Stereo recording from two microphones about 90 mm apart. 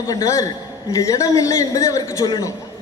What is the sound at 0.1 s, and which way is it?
A man's voice, 40° left (ahead or behind).